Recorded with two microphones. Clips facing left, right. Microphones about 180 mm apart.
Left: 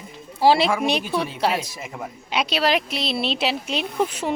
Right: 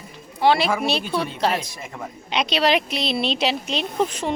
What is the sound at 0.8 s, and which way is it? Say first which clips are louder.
A woman's voice: left 1 dB; 15° left (ahead or behind).